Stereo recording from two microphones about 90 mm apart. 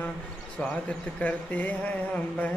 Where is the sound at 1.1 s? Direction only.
15° left (ahead or behind).